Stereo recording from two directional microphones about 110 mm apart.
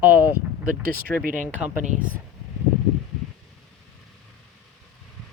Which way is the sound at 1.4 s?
15° right (ahead or behind).